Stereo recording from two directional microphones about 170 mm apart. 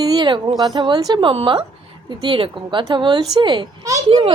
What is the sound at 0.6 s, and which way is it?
A woman's voice, 25° right (ahead or behind).